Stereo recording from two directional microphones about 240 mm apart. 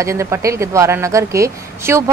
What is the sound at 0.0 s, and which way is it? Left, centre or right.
Speech, centre.